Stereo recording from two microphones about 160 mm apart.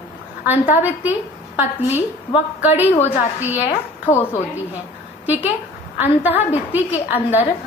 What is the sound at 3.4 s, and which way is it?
Speech, 10° right (ahead or behind).